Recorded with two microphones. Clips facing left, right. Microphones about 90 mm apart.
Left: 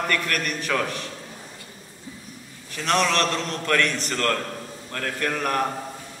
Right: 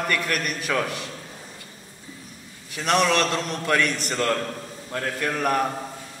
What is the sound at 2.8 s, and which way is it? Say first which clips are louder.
A man's voice: right 1 dB; 15° right (ahead or behind).